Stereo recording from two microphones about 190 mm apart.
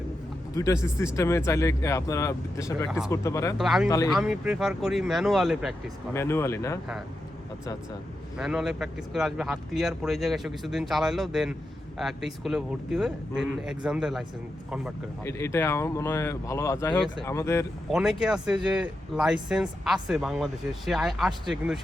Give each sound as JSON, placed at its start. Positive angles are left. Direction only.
{"t": 0.5, "sound": "speech", "side_deg": 15}
{"t": 3.6, "sound": "speech", "side_deg": 0}
{"t": 3.8, "sound": "speech", "side_deg": 15}
{"t": 4.1, "sound": "speech", "side_deg": 0}
{"t": 6.1, "sound": "speech", "side_deg": 15}
{"t": 8.4, "sound": "speech", "side_deg": 0}
{"t": 15.2, "sound": "speech", "side_deg": 15}
{"t": 17.9, "sound": "speech", "side_deg": -5}